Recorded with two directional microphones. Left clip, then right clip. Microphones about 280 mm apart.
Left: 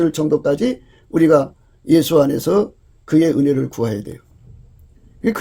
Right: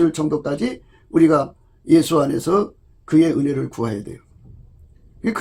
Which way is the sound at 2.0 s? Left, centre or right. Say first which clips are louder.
Left 4 dB; left.